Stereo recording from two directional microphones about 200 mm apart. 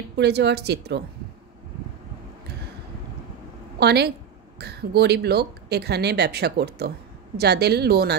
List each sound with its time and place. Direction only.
0.2 s speech: 55° right (ahead or behind)
3.8 s speech: 55° right (ahead or behind)